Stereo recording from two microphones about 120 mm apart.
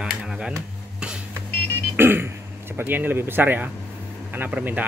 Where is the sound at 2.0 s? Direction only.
20° right (ahead or behind).